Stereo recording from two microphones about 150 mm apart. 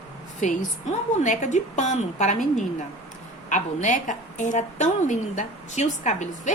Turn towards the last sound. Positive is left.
turn(degrees=55)  # may be behind; listen again after turning